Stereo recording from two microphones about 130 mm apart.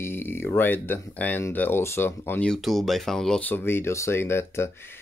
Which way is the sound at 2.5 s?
Centre (ahead or behind).